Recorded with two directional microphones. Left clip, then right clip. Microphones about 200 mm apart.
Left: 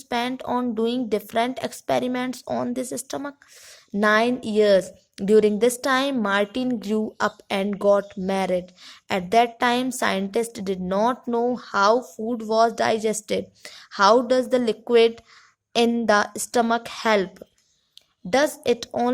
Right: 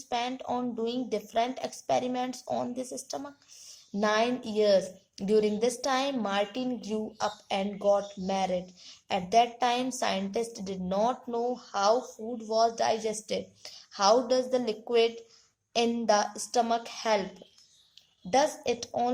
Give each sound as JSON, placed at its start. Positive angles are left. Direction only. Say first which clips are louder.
{"t": 0.1, "sound": "a woman's voice", "louder": "left 6 dB", "side_deg": 45}
{"t": 18.3, "sound": "a woman's voice", "louder": "left 6 dB", "side_deg": 50}